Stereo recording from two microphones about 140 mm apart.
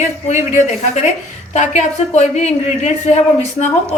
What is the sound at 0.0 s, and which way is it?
Speech, 60° left (ahead or behind).